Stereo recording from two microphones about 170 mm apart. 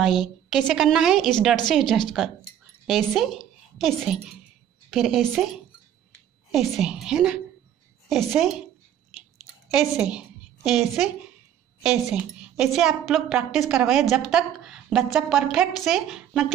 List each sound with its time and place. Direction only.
0.0 s a woman's voice: centre (ahead or behind)
9.7 s a woman's voice: 5° right (ahead or behind)
12.1 s a woman's voice: 5° right (ahead or behind)